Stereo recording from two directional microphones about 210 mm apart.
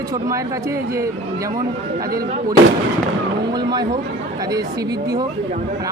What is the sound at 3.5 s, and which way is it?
Speech, 20° right (ahead or behind).